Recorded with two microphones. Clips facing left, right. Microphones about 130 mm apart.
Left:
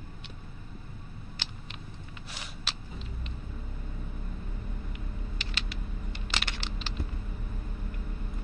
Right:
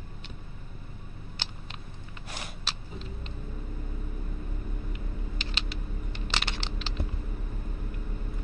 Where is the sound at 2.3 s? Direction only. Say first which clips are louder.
Right 3 dB; 50° right (ahead or behind).